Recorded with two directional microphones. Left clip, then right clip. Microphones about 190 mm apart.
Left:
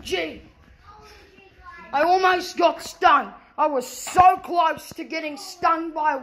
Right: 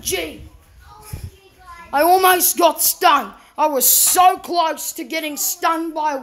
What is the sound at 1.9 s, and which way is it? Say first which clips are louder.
A woman's voice: right 5 dB; 40° right (ahead or behind).